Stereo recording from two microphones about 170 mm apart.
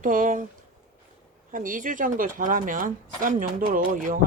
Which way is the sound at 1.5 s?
50° right (ahead or behind).